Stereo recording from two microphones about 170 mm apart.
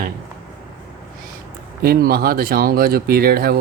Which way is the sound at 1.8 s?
60° right (ahead or behind).